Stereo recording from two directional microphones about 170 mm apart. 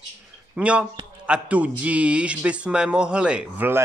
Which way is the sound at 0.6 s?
5° right (ahead or behind).